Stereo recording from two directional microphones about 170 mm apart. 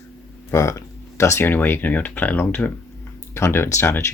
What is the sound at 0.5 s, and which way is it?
Speech, 15° left (ahead or behind).